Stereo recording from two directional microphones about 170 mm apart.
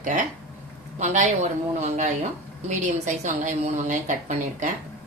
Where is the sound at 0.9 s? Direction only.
45° right (ahead or behind).